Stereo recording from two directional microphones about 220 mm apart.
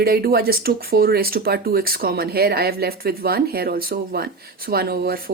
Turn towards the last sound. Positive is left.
turn(degrees=-45)  # may be behind; listen again after turning